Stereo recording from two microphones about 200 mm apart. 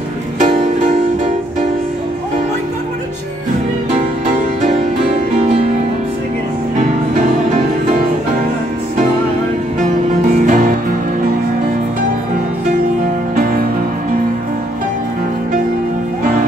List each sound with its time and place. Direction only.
10.4 s music: 40° right (ahead or behind)